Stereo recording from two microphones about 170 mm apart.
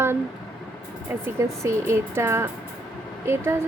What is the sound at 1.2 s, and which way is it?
A woman's voice, 15° right (ahead or behind).